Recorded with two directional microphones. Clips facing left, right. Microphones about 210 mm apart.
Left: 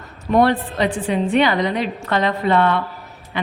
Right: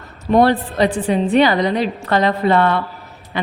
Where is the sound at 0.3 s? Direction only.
35° right (ahead or behind).